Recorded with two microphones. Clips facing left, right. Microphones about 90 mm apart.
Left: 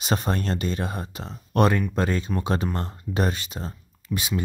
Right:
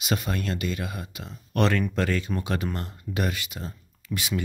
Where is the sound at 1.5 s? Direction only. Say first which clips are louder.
Left 3 dB; 20° left (ahead or behind).